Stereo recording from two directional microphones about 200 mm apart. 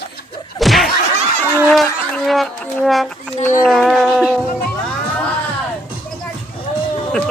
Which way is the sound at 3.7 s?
Centre (ahead or behind).